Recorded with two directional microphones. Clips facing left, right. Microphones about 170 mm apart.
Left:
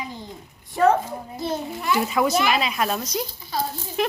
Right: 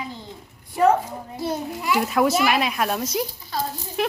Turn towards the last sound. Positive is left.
turn(degrees=-5)  # may be behind; listen again after turning